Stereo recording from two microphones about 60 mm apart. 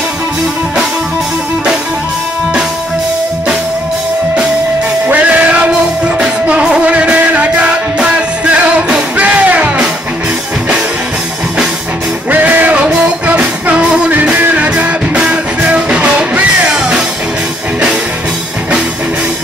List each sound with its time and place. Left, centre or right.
5.0 s music: right
12.3 s music: right
14.1 s music: right